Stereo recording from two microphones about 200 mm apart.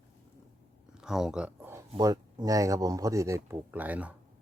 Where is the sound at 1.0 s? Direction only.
5° right (ahead or behind).